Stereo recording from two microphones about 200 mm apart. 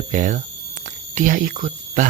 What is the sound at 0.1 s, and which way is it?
Speech, 40° right (ahead or behind).